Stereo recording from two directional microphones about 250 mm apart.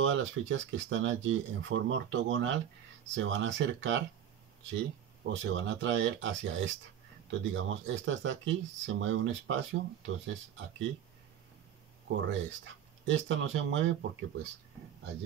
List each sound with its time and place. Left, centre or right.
0.0 s speech: right
5.3 s speech: right
12.3 s speech: right